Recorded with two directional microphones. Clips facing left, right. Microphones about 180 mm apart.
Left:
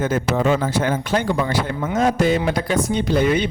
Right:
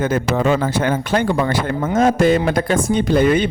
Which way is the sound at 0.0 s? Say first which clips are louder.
Right 2 dB; 60° right (ahead or behind).